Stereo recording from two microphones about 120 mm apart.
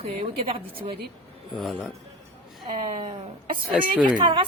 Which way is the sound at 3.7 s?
10° right (ahead or behind).